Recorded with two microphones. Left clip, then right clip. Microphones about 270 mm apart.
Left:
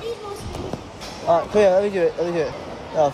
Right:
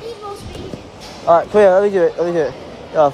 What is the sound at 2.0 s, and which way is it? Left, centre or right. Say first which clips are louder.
Speech: right 5 dB; right.